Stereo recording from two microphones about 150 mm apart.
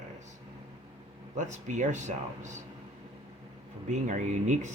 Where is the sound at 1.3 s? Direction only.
55° right (ahead or behind).